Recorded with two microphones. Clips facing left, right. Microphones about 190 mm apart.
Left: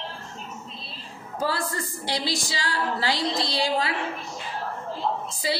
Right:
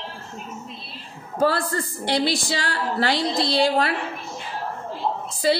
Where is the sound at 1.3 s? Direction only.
60° right (ahead or behind).